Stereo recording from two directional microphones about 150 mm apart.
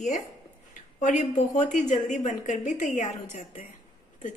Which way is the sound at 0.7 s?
60° left (ahead or behind).